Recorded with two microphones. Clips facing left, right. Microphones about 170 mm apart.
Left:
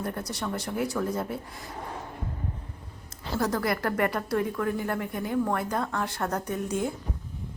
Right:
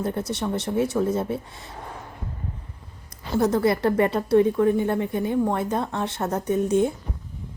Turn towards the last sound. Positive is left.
turn(degrees=-25)  # may be behind; listen again after turning